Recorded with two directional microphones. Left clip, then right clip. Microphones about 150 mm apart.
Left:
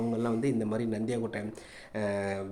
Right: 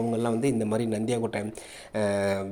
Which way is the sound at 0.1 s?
15° right (ahead or behind).